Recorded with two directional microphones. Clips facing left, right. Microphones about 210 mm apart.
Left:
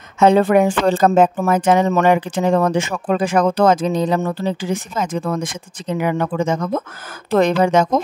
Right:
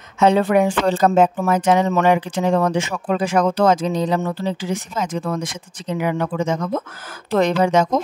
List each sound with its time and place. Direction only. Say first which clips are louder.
0.2 s speech: left 3 dB; 50° left (ahead or behind)